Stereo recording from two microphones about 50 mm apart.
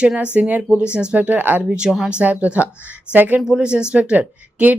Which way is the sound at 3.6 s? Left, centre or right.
Centre.